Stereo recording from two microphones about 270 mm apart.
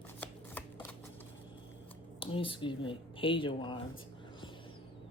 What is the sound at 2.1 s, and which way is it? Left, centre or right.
Speech, centre.